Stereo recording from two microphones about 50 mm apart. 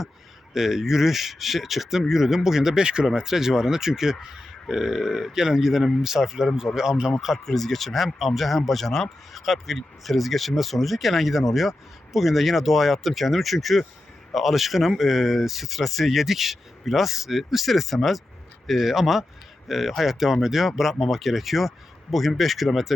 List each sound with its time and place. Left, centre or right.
0.5 s speech: centre
7.4 s speech: centre